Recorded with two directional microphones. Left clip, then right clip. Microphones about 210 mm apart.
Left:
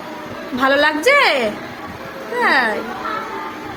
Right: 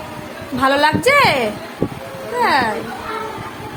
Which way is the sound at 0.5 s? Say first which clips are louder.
Even; 10° right (ahead or behind).